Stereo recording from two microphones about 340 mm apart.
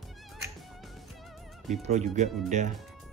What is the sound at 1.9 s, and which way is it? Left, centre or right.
Speech, right.